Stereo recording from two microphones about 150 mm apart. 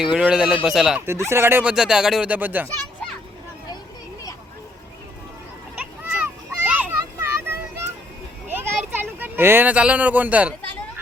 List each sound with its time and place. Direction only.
0.0 s speech: 5° right (ahead or behind)
1.0 s speech: 15° right (ahead or behind)
1.7 s speech: 5° right (ahead or behind)
6.1 s a sound: 10° right (ahead or behind)